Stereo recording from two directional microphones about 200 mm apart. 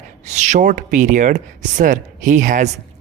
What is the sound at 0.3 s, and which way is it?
Speech, 35° right (ahead or behind).